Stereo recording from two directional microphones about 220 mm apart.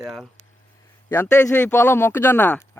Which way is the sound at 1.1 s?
10° left (ahead or behind).